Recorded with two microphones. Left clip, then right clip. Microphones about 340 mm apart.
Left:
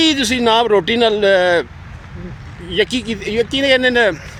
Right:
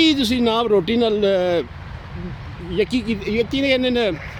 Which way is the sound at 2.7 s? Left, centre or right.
Left.